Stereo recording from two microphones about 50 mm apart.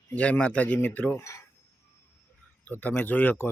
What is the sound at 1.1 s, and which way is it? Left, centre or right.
Speech, left.